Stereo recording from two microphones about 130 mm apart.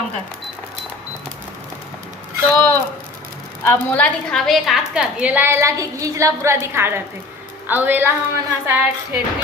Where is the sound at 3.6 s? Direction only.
15° left (ahead or behind).